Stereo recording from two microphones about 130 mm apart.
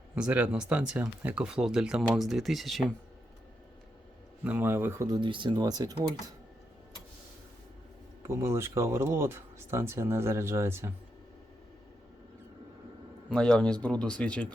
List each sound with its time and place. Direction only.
0.2 s speech: 10° right (ahead or behind)
4.4 s speech: 15° right (ahead or behind)
5.0 s speech: 35° right (ahead or behind)
8.2 s speech: 20° right (ahead or behind)
13.3 s speech: 5° left (ahead or behind)